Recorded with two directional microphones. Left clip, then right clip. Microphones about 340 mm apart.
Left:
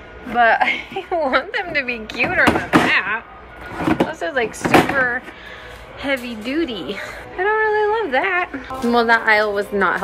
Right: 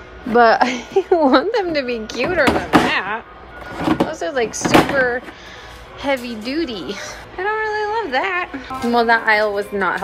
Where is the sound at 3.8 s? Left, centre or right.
Centre.